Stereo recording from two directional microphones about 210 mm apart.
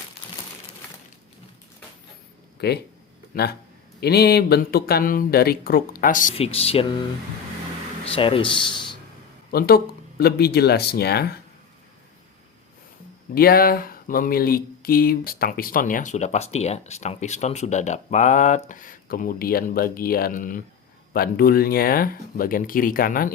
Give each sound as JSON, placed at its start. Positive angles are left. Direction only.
{"t": 2.6, "sound": "speech", "side_deg": 50}
{"t": 8.0, "sound": "speech", "side_deg": 25}
{"t": 9.5, "sound": "speech", "side_deg": 45}
{"t": 13.3, "sound": "speech", "side_deg": 45}